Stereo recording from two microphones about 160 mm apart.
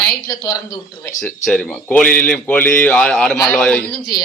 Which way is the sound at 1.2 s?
Centre (ahead or behind).